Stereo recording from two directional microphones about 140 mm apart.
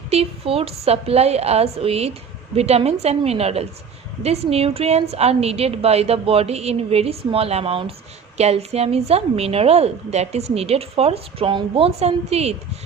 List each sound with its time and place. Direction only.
0.1 s a woman's voice: 45° right (ahead or behind)